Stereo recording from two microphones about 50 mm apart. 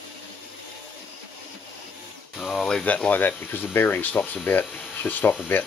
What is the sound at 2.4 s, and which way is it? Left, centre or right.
Speech, centre.